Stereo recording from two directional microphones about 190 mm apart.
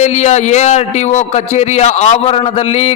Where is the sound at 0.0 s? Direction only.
35° left (ahead or behind).